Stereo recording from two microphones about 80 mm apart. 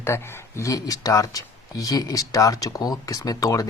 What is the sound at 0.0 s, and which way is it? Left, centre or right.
Speech, left.